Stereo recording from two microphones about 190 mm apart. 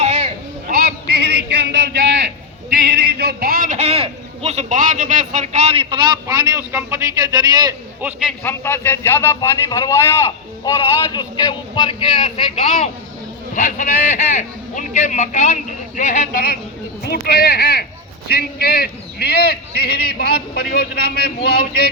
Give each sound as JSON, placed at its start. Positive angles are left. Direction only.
{"t": 0.0, "sound": "a sound", "side_deg": -30}
{"t": 0.7, "sound": "a sound", "side_deg": -55}
{"t": 2.8, "sound": "a man's voice", "side_deg": -60}
{"t": 6.2, "sound": "a man's voice", "side_deg": -15}
{"t": 8.0, "sound": "a man's voice", "side_deg": -5}
{"t": 8.4, "sound": "a man's voice", "side_deg": 10}
{"t": 13.5, "sound": "a man's voice", "side_deg": 40}